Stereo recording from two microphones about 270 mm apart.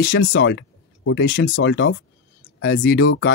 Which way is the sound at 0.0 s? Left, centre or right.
Left.